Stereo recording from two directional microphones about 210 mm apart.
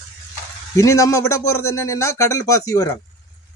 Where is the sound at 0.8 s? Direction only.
15° left (ahead or behind).